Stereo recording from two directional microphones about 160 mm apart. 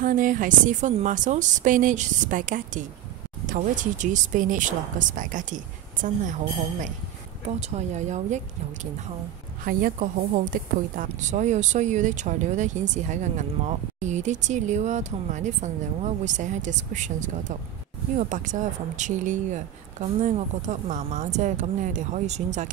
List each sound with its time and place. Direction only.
0.0 s speech: 55° right (ahead or behind)
9.7 s a woman's voice: 65° right (ahead or behind); by 22.7 s 45° right (ahead or behind)